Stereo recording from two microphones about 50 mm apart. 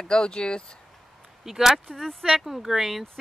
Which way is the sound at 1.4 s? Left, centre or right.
Centre.